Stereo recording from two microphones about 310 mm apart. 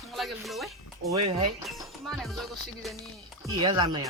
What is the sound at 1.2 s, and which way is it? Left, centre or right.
Speech, right.